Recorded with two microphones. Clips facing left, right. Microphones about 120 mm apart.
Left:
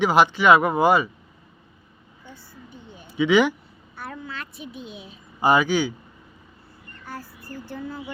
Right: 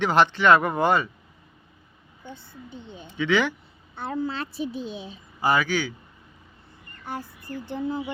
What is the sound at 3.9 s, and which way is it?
A child's voice, 30° right (ahead or behind).